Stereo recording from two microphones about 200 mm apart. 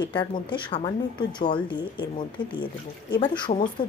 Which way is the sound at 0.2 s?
25° left (ahead or behind).